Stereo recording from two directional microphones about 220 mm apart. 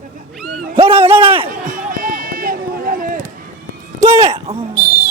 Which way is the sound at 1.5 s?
40° right (ahead or behind).